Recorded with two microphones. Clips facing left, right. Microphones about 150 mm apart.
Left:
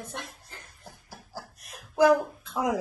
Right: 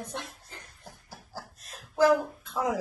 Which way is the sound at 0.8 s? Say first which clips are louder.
Left 1 dB; 15° left (ahead or behind).